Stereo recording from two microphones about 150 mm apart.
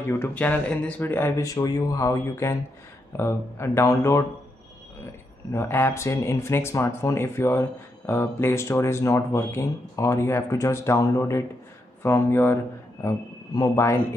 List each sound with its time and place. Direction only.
0.0 s speech: 15° left (ahead or behind)
5.5 s speech: 15° left (ahead or behind)
13.6 s speech: 20° left (ahead or behind)